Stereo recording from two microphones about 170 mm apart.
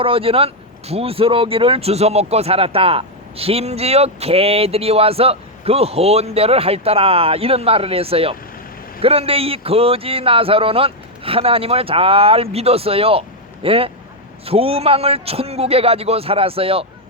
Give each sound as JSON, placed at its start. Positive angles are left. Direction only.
{"t": 0.0, "sound": "speech", "side_deg": -35}